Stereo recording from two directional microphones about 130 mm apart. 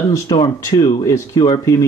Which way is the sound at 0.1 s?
25° left (ahead or behind).